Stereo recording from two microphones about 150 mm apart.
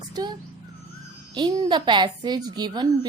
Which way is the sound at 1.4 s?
30° right (ahead or behind).